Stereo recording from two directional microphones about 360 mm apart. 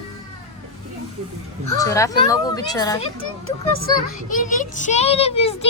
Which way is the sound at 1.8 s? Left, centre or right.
Centre.